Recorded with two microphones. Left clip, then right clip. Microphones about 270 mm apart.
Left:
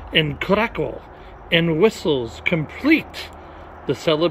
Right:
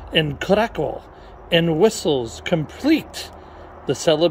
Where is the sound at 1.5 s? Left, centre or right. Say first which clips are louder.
Even; right.